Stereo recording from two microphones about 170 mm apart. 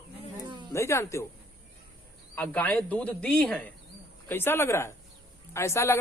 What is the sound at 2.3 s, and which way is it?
Speech, 10° left (ahead or behind).